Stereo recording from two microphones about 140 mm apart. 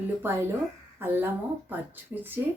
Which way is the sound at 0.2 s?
15° right (ahead or behind).